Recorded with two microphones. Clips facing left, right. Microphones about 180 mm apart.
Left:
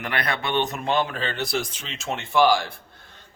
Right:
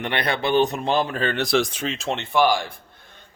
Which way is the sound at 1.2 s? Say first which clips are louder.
Right 6 dB; 80° right.